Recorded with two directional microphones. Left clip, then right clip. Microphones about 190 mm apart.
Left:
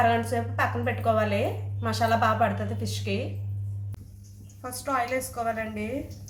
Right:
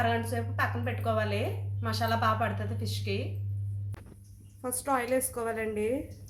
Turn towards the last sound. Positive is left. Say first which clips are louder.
# left 2 dB
turn(degrees=-50)  # may be behind; listen again after turning